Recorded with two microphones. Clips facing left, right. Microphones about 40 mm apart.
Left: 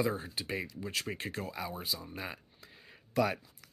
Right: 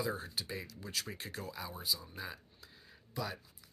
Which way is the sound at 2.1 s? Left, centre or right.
Left.